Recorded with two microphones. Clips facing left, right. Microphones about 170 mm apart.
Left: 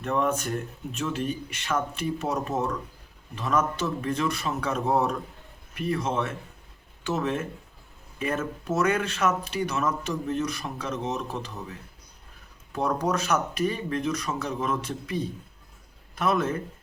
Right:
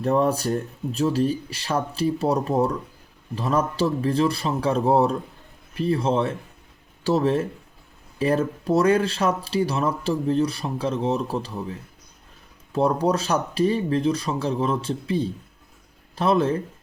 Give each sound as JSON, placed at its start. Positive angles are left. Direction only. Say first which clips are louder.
{"t": 0.0, "sound": "speech", "louder": "right 5 dB", "side_deg": -35}